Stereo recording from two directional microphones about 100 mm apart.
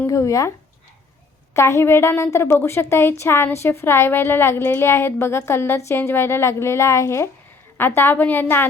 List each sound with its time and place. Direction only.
0.1 s speech: 35° left (ahead or behind)
1.5 s a woman's voice: 30° left (ahead or behind)